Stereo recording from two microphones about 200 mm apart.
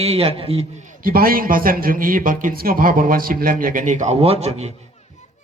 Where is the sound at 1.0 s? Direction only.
45° right (ahead or behind).